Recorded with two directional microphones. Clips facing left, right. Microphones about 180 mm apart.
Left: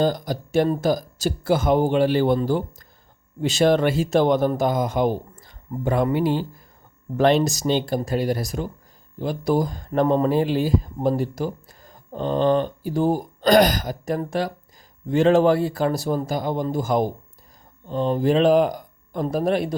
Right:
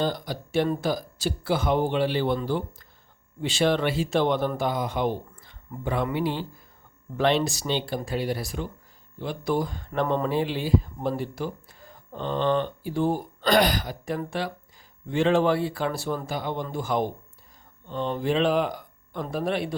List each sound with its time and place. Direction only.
0.0 s speech: 45° left (ahead or behind)